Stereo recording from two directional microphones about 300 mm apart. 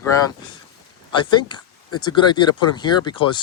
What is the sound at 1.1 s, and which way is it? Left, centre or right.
Speech, centre.